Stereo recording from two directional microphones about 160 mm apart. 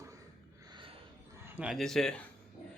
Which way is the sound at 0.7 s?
35° right (ahead or behind).